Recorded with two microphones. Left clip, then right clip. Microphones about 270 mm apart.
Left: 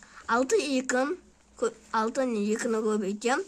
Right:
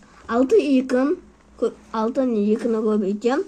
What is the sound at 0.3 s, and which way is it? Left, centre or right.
Speech, left.